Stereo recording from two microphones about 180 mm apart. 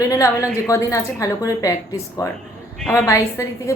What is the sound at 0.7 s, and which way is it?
A woman's voice, 15° left (ahead or behind).